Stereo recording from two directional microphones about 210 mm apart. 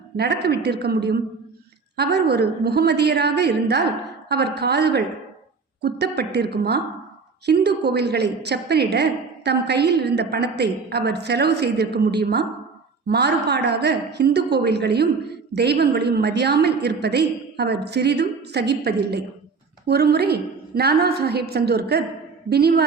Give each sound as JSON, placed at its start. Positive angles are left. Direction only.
{"t": 0.2, "sound": "a woman's voice", "side_deg": -50}